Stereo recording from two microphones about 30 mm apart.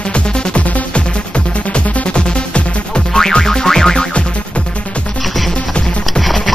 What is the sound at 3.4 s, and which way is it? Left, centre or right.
Music, centre.